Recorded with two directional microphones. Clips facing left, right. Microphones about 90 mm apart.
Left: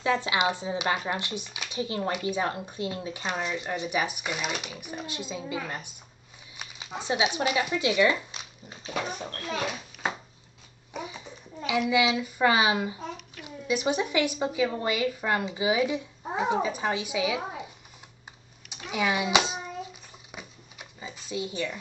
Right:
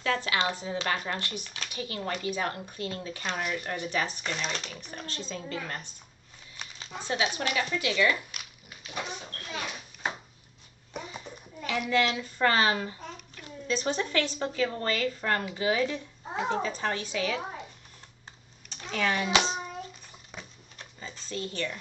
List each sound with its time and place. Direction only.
0.0 s speech: 20° left (ahead or behind)
6.5 s a sound: 15° left (ahead or behind)
7.5 s speech: 15° left (ahead or behind)
8.9 s a child's voice: 50° left (ahead or behind)
11.0 s a sound: 10° left (ahead or behind)
11.9 s speech: 10° left (ahead or behind)
18.7 s hands: 10° left (ahead or behind)